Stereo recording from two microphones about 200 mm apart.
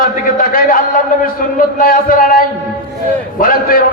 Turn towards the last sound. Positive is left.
turn(degrees=45)  # may be behind; listen again after turning